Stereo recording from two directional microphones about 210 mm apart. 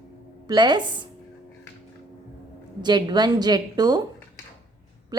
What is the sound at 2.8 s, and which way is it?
A woman's voice, 20° right (ahead or behind).